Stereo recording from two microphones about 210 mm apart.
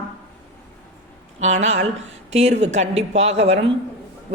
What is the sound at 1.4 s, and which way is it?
A man's voice, 35° right (ahead or behind).